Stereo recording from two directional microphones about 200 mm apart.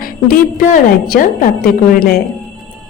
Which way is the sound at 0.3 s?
45° left (ahead or behind).